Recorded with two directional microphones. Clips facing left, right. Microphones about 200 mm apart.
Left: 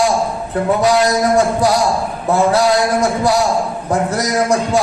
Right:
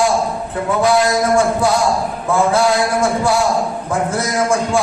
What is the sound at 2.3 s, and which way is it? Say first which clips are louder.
A man's voice: left 2 dB; 40° left (ahead or behind).